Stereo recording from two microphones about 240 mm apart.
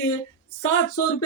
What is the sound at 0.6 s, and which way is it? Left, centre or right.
Speech, left.